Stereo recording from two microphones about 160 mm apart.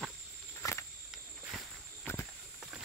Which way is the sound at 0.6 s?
15° left (ahead or behind).